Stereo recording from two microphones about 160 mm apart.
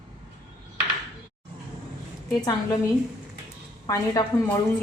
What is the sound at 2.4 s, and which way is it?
Speech, 25° left (ahead or behind).